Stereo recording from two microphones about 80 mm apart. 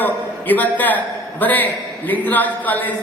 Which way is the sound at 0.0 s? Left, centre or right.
Left.